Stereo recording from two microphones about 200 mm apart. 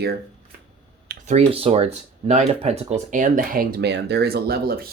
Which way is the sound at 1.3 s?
30° right (ahead or behind).